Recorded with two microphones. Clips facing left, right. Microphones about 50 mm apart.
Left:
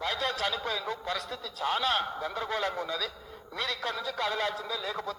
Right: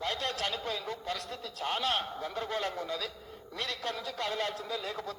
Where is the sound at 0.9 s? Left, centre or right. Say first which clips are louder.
Left 3 dB; left.